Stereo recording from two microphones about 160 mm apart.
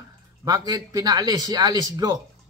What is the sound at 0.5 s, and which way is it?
A man's voice, 25° right (ahead or behind).